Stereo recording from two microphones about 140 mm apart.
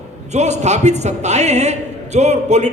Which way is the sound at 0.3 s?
55° right (ahead or behind).